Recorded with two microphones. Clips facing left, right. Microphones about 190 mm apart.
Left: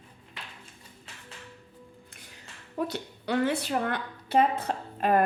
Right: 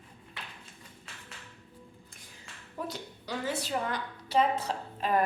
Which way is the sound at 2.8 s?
65° left (ahead or behind).